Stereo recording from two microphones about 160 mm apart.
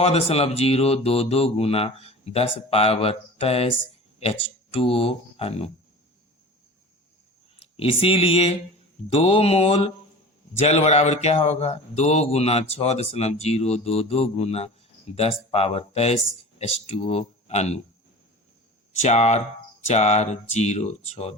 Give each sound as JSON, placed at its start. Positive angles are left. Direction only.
{"t": 0.0, "sound": "speech", "side_deg": 40}
{"t": 7.6, "sound": "speech", "side_deg": 35}
{"t": 19.0, "sound": "speech", "side_deg": 45}